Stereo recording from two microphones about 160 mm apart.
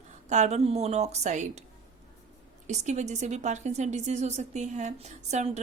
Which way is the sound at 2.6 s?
45° right (ahead or behind).